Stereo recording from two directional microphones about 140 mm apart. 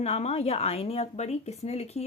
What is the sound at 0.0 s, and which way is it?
Speech, 50° left (ahead or behind).